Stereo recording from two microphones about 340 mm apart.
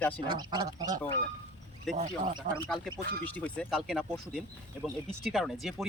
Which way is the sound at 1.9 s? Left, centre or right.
Centre.